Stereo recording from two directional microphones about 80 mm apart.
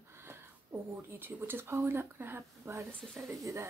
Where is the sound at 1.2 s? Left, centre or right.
Right.